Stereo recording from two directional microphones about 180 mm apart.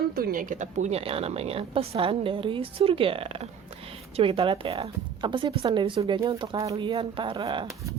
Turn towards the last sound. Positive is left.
turn(degrees=-25)  # may be behind; listen again after turning